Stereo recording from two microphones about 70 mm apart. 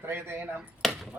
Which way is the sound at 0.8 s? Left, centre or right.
Centre.